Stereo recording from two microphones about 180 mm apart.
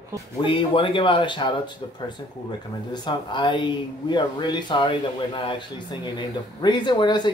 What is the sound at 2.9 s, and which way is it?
Speech, 25° left (ahead or behind).